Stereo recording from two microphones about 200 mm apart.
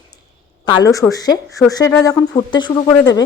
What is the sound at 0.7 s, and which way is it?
A woman's voice, 20° left (ahead or behind).